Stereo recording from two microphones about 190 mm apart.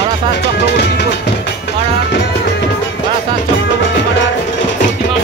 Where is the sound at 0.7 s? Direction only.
65° left (ahead or behind).